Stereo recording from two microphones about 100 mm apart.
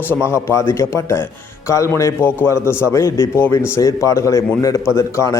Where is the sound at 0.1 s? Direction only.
25° left (ahead or behind).